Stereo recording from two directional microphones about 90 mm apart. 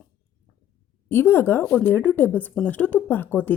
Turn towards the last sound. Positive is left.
turn(degrees=20)  # may be behind; listen again after turning